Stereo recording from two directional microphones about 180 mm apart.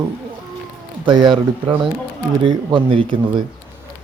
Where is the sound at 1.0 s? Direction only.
25° right (ahead or behind).